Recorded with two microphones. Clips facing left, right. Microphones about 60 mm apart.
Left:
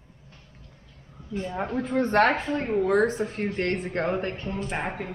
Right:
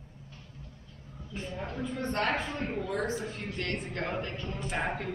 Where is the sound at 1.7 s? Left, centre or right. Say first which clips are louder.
Left 11 dB; left.